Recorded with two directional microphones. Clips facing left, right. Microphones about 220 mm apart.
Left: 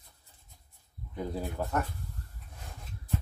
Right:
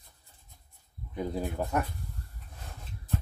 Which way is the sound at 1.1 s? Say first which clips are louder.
Right 2 dB; 15° right (ahead or behind).